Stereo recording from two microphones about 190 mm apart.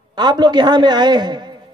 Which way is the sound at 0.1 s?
20° right (ahead or behind).